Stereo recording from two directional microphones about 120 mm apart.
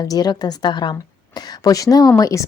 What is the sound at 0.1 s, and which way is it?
A woman's voice, 35° left (ahead or behind).